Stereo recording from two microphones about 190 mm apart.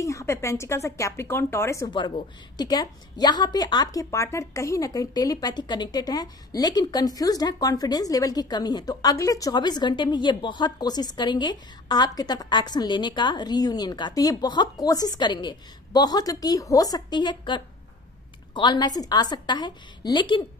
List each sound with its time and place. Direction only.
0.0 s a woman's voice: 15° left (ahead or behind)